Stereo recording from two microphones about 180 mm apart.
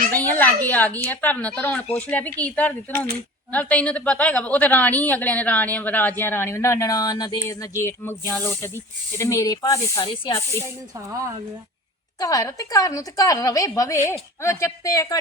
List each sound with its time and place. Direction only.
0.1 s a woman's voice: 10° left (ahead or behind)
10.9 s speech: 15° right (ahead or behind)
12.2 s a woman's voice: 20° left (ahead or behind)